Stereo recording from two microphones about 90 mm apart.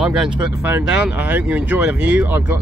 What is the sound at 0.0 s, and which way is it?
Speech, 10° right (ahead or behind).